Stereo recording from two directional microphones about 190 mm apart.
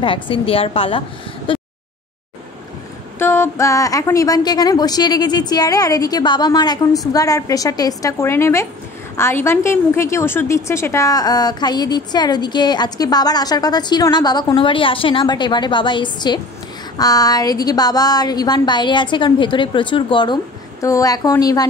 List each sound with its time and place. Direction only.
0.0 s a woman's voice: 25° left (ahead or behind)
1.5 s a sound: 25° left (ahead or behind)
3.2 s a woman's voice: 10° left (ahead or behind)